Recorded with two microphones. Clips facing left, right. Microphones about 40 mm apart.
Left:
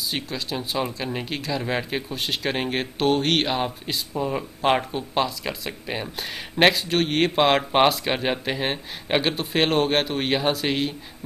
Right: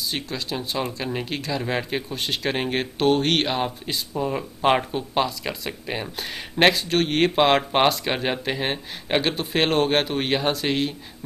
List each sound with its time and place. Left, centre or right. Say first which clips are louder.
0.1 s speech: even; centre